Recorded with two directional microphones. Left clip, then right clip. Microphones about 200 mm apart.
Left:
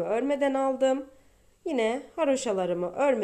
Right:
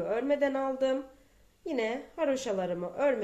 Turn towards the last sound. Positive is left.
turn(degrees=35)  # may be behind; listen again after turning